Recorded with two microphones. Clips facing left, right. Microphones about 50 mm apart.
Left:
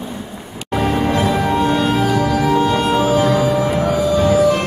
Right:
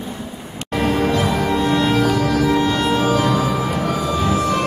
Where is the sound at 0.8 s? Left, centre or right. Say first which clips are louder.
Left 1 dB; left.